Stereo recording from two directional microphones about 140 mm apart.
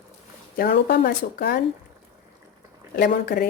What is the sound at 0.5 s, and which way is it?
Speech, 90° left.